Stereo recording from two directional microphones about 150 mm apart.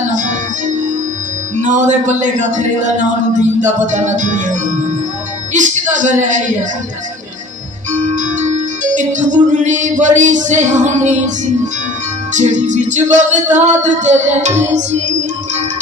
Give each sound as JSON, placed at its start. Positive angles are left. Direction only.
{"t": 0.1, "sound": "music", "side_deg": -60}
{"t": 5.5, "sound": "speech", "side_deg": -55}
{"t": 7.9, "sound": "music", "side_deg": -55}
{"t": 12.4, "sound": "music", "side_deg": -55}